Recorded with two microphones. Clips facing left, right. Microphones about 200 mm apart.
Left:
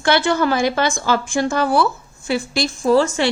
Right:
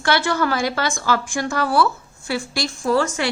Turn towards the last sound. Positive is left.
turn(degrees=25)  # may be behind; listen again after turning